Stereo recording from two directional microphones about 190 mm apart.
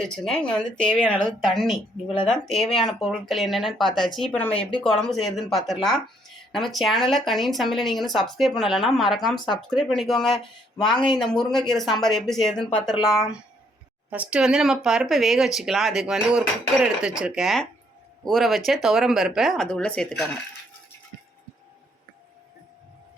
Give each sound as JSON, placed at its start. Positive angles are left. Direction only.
{"t": 0.0, "sound": "speech", "side_deg": 5}
{"t": 10.8, "sound": "speech", "side_deg": 25}
{"t": 11.1, "sound": "speech", "side_deg": 0}
{"t": 14.1, "sound": "speech", "side_deg": -5}